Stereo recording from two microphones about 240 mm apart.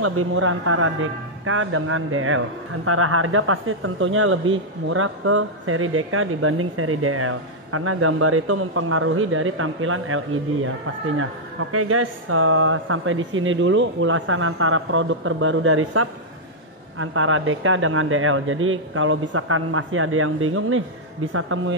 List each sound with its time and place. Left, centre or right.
0.0 s a man's voice: right
11.7 s a man's voice: right